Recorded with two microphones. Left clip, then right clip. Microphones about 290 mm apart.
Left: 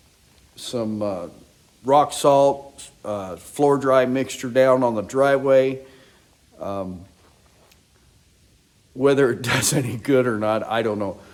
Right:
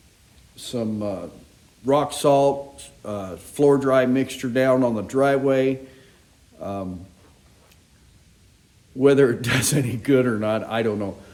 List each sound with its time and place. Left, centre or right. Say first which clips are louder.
0.5 s a man's voice: left 1 dB; left
9.0 s a man's voice: right 1 dB; centre